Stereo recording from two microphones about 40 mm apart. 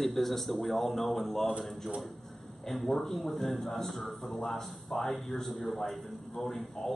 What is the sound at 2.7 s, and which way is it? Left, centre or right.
A man's voice, centre.